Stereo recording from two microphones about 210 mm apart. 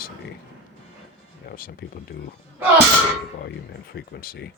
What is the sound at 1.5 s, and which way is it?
Speech, 45° left (ahead or behind).